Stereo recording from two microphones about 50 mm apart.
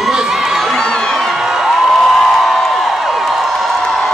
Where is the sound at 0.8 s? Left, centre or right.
Centre.